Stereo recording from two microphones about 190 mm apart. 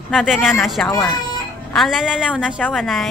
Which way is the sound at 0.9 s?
20° left (ahead or behind).